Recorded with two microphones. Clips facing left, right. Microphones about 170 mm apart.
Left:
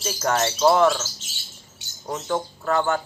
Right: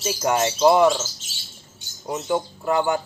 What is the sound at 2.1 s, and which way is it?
Speech, 15° right (ahead or behind).